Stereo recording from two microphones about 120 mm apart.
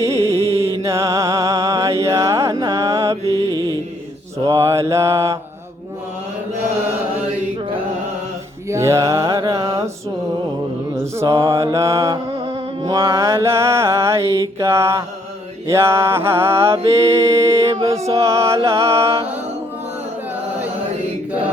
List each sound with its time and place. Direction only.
0.0 s music: 25° right (ahead or behind)
0.3 s music: 55° right (ahead or behind)
0.8 s music: 25° right (ahead or behind)
3.2 s music: 25° left (ahead or behind)
4.4 s mantra: 25° right (ahead or behind)
8.7 s mantra: 25° right (ahead or behind)
10.9 s mantra: 25° right (ahead or behind)